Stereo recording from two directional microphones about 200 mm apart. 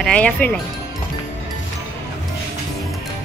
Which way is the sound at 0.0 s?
5° left (ahead or behind).